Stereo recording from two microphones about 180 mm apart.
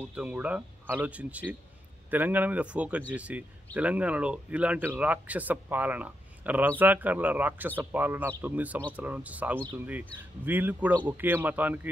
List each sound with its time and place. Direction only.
0.0 s speech: 5° right (ahead or behind)